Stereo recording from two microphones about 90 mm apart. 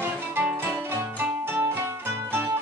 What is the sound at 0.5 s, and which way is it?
Music, 25° right (ahead or behind).